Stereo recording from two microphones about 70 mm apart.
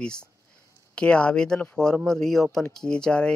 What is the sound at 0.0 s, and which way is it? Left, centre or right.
Speech, centre.